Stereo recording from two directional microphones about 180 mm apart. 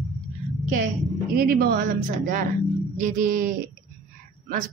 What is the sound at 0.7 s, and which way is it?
A woman's voice, 50° right (ahead or behind).